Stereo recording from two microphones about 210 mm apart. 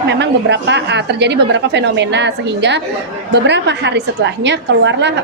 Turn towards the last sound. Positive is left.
turn(degrees=-60)  # may be behind; listen again after turning